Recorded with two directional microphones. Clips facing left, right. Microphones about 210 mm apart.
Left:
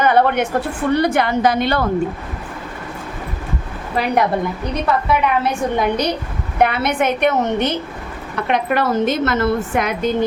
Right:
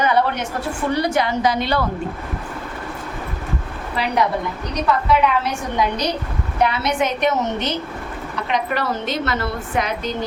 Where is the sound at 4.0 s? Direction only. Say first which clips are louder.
Left 3 dB; 50° left (ahead or behind).